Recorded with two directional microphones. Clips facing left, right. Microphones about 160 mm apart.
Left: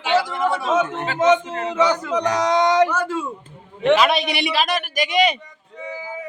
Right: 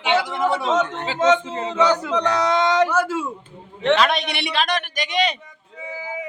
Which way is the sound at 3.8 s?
10° left (ahead or behind).